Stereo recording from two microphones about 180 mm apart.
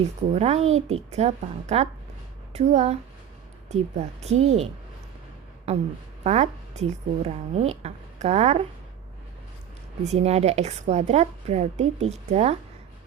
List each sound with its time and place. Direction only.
0.3 s a woman's voice: 35° right (ahead or behind)
10.0 s a woman's voice: 35° right (ahead or behind)